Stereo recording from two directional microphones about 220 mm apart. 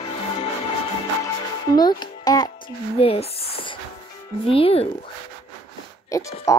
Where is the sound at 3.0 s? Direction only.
25° left (ahead or behind).